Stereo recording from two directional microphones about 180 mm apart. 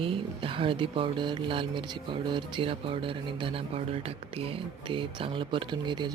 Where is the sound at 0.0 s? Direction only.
30° right (ahead or behind).